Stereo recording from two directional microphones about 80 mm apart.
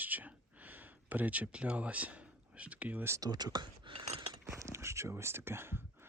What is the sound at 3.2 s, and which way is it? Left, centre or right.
Speech, right.